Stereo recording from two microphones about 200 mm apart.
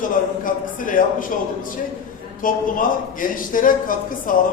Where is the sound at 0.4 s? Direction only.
45° left (ahead or behind).